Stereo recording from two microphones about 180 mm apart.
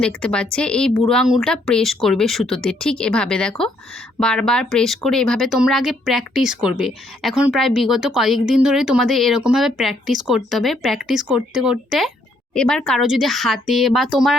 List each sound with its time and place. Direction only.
0.0 s speech: 5° left (ahead or behind)